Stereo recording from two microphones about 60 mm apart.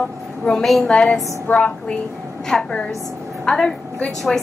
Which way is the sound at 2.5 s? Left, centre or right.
Centre.